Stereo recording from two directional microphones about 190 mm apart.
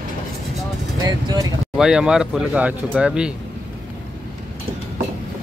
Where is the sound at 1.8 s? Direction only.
5° right (ahead or behind).